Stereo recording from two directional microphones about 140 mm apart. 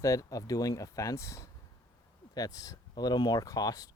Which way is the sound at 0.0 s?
25° left (ahead or behind).